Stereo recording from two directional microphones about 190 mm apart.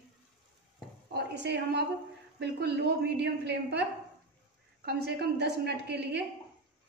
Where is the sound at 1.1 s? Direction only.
60° right (ahead or behind).